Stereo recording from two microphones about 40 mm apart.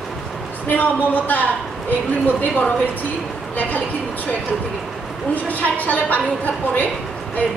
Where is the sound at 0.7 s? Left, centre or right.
Left.